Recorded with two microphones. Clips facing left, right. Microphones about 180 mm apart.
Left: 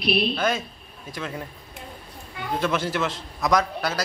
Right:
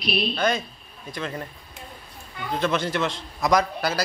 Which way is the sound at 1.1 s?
5° left (ahead or behind).